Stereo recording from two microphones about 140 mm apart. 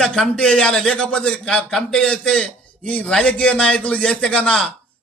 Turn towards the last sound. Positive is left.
turn(degrees=5)  # may be behind; listen again after turning